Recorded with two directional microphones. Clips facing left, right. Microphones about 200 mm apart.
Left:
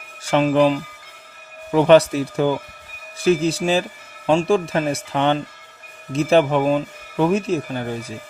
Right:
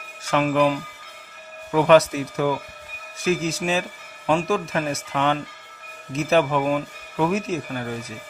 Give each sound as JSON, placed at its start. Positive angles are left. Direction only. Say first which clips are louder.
{"t": 0.3, "sound": "speech", "louder": "left 4 dB", "side_deg": 30}